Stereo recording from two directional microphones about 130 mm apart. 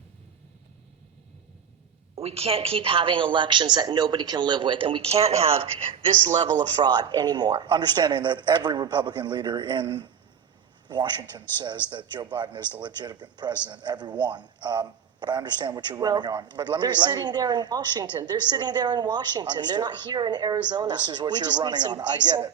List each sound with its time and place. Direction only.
2.1 s a woman's voice: 50° right (ahead or behind)
6.2 s speech: 35° right (ahead or behind)